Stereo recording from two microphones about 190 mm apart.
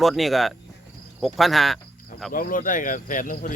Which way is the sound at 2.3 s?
45° left (ahead or behind).